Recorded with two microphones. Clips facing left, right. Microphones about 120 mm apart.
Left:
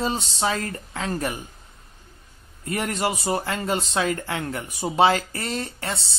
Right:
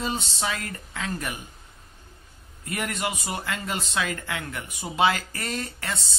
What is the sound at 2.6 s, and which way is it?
Speech, 30° left (ahead or behind).